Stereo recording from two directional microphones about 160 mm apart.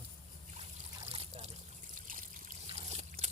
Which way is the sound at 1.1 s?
40° right (ahead or behind).